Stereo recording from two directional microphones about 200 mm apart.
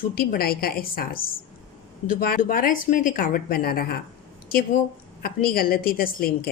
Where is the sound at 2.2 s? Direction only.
45° left (ahead or behind).